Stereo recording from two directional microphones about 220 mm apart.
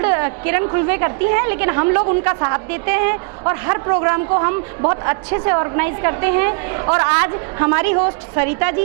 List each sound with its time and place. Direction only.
0.0 s a woman's voice: 20° right (ahead or behind)